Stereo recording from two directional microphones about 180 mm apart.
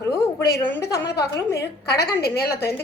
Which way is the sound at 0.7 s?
15° left (ahead or behind).